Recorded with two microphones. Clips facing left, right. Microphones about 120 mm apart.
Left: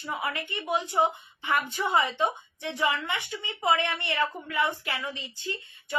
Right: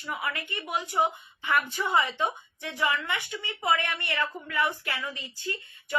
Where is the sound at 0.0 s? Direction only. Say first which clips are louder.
Left 1 dB; 25° left (ahead or behind).